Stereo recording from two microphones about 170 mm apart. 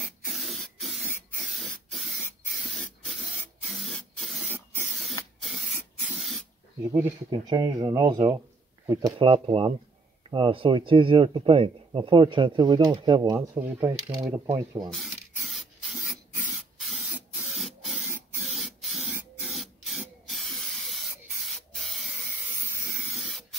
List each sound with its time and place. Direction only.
0.0 s spray: centre (ahead or behind)
6.9 s speech: 15° right (ahead or behind)
9.1 s speech: 30° right (ahead or behind)
14.9 s rub: centre (ahead or behind)
18.1 s spray: 10° right (ahead or behind)
18.5 s spray: centre (ahead or behind)